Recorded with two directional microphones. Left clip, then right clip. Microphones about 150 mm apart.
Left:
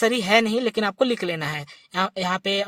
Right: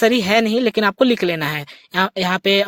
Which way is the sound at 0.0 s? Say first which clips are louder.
Right 4 dB; 25° right (ahead or behind).